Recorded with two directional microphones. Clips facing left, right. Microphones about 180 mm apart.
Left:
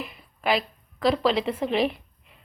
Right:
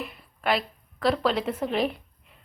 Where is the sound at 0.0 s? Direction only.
Centre (ahead or behind).